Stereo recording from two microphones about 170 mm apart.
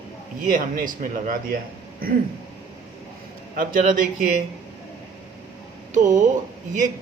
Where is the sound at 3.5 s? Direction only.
55° right (ahead or behind).